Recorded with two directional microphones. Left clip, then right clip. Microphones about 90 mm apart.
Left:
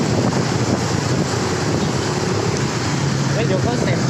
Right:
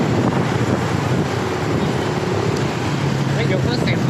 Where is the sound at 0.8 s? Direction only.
35° left (ahead or behind).